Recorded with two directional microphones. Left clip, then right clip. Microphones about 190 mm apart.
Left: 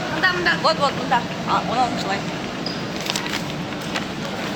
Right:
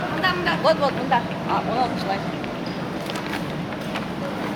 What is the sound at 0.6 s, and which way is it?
Speech, 15° right (ahead or behind).